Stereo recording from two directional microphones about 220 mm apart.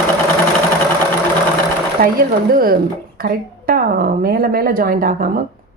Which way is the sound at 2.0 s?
40° right (ahead or behind).